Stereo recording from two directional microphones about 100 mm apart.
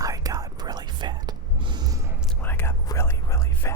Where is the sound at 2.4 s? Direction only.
20° left (ahead or behind).